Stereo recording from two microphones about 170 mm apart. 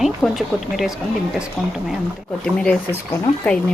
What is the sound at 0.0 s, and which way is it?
Speech, centre (ahead or behind).